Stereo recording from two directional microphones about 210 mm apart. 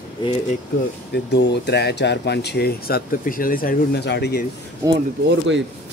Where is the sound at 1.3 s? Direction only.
50° left (ahead or behind).